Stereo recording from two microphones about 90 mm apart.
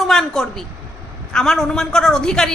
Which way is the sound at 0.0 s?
Centre (ahead or behind).